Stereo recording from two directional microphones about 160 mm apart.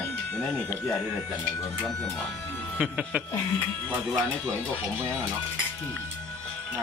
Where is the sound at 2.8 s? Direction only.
5° right (ahead or behind).